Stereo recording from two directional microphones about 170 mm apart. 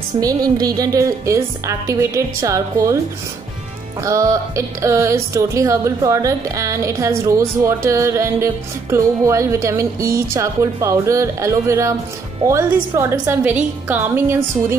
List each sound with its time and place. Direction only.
0.2 s speech: 20° right (ahead or behind)
4.0 s speech: 20° right (ahead or behind)